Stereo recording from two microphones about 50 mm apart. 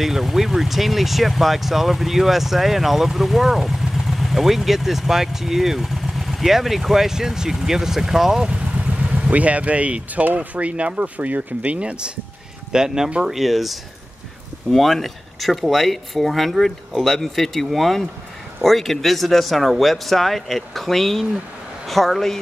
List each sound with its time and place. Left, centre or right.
0.0 s speech: centre
8.5 s speech: right
12.7 s speech: centre